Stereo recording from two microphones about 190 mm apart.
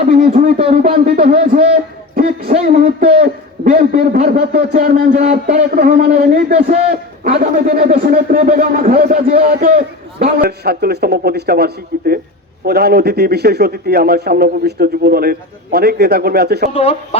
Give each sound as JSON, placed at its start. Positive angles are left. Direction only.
{"t": 0.1, "sound": "speech", "side_deg": -50}
{"t": 0.6, "sound": "a man's voice", "side_deg": -35}
{"t": 2.6, "sound": "speech", "side_deg": -50}
{"t": 3.0, "sound": "a man's voice", "side_deg": -30}
{"t": 3.6, "sound": "a man's voice", "side_deg": -50}
{"t": 5.1, "sound": "a man's voice", "side_deg": -35}
{"t": 5.7, "sound": "a man's voice", "side_deg": -50}
{"t": 7.5, "sound": "a man's voice", "side_deg": -45}
{"t": 16.7, "sound": "speech", "side_deg": 30}